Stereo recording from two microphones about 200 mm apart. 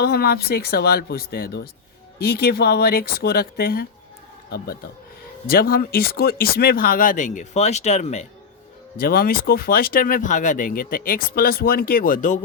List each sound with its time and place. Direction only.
0.0 s speech: 50° left (ahead or behind)
5.5 s speech: 50° left (ahead or behind)
9.0 s speech: 50° left (ahead or behind)